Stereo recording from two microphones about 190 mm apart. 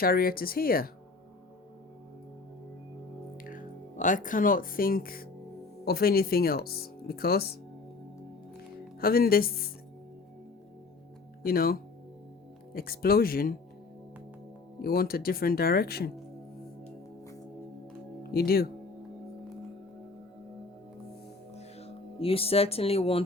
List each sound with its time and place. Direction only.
0.0 s speech: 50° left (ahead or behind)
3.4 s speech: 45° left (ahead or behind)
8.5 s music: 50° left (ahead or behind)
11.4 s speech: 50° left (ahead or behind)
14.8 s speech: 50° left (ahead or behind)
18.2 s speech: 55° left (ahead or behind)
21.5 s music: 30° left (ahead or behind)